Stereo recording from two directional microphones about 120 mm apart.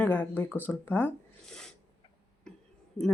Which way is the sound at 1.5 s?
5° left (ahead or behind).